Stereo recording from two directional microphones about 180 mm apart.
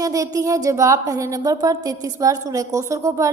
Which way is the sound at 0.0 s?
20° right (ahead or behind).